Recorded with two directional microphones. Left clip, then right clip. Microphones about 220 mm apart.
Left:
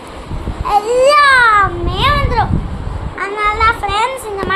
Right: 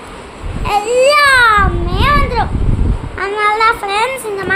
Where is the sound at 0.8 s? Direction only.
5° right (ahead or behind).